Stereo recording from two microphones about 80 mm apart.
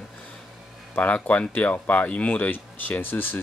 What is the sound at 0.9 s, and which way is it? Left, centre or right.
Speech, centre.